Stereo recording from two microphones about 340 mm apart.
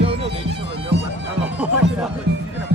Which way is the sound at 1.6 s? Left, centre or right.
Centre.